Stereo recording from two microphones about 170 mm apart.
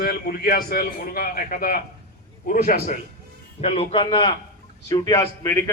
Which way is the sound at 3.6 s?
35° left (ahead or behind).